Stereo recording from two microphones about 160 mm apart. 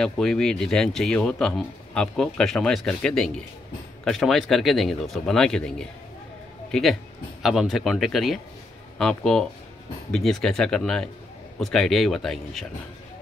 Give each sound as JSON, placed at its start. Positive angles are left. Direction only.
{"t": 0.0, "sound": "speech", "side_deg": 5}